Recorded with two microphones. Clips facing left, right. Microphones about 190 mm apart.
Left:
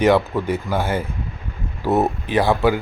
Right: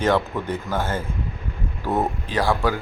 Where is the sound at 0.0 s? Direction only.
10° left (ahead or behind).